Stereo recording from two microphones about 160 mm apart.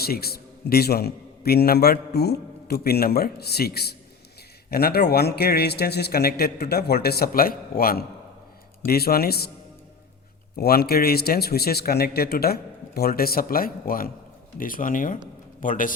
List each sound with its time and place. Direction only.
0.0 s a man's voice: 75° left (ahead or behind)
10.6 s a man's voice: 75° left (ahead or behind); by 15.9 s 55° left (ahead or behind)